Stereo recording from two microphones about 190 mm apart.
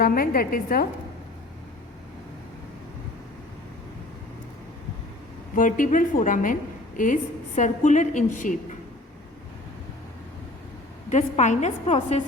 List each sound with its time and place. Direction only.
0.0 s a woman's voice: 50° left (ahead or behind)
5.5 s a woman's voice: 45° left (ahead or behind)
11.1 s a woman's voice: 40° left (ahead or behind)